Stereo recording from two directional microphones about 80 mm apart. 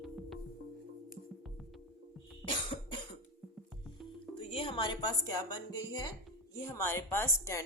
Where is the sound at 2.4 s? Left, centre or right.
Left.